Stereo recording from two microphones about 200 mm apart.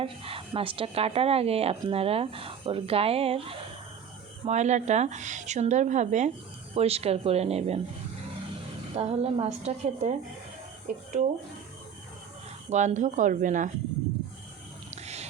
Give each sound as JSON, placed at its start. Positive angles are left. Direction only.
{"t": 0.0, "sound": "a woman's voice", "side_deg": -25}
{"t": 9.0, "sound": "speech", "side_deg": -30}
{"t": 12.7, "sound": "speech", "side_deg": -35}
{"t": 14.8, "sound": "wild animals", "side_deg": -35}